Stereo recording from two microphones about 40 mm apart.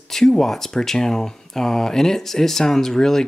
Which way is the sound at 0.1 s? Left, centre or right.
Centre.